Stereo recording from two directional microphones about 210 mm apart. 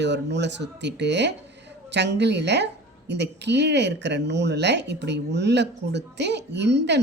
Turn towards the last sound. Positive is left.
turn(degrees=-55)  # may be behind; listen again after turning